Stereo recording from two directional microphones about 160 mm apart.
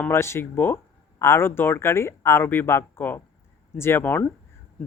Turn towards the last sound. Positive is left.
turn(degrees=10)  # may be behind; listen again after turning